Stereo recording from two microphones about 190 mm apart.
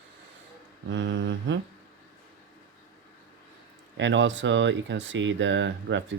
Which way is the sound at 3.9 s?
70° right (ahead or behind).